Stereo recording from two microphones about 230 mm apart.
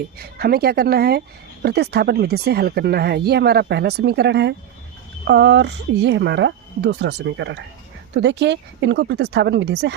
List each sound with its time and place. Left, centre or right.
0.2 s speech: right